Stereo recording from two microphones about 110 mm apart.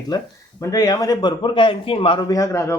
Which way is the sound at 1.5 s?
50° left (ahead or behind).